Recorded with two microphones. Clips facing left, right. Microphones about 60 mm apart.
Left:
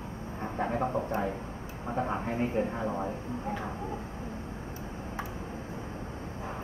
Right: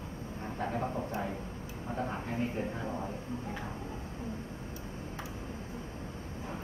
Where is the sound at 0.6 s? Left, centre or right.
Left.